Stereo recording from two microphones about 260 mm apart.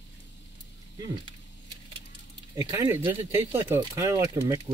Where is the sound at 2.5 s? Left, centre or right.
Centre.